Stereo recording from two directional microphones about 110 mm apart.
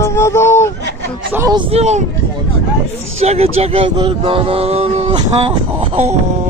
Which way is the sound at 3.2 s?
70° right (ahead or behind).